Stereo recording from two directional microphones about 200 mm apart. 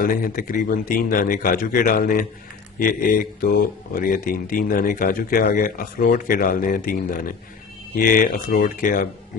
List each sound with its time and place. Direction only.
0.1 s speech: 45° left (ahead or behind)